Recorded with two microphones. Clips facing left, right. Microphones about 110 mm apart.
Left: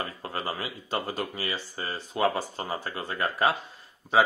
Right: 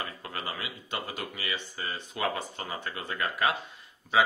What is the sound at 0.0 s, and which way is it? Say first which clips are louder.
Speech: left 4 dB; 35° left (ahead or behind).